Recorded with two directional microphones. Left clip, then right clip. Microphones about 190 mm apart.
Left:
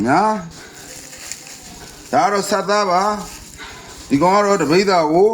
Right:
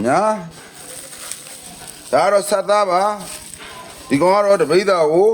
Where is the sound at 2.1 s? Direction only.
50° right (ahead or behind).